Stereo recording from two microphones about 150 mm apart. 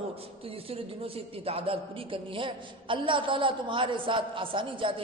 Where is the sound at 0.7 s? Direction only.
40° right (ahead or behind).